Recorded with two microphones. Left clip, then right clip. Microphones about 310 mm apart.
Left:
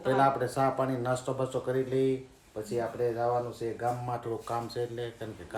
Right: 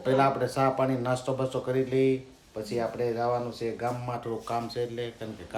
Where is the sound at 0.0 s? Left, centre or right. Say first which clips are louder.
Right 1 dB; centre.